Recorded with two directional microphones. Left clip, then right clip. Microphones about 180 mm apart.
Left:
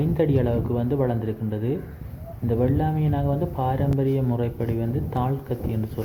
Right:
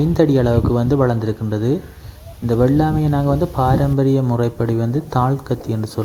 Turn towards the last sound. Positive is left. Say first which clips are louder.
# right 6 dB
turn(degrees=-40)  # may be behind; listen again after turning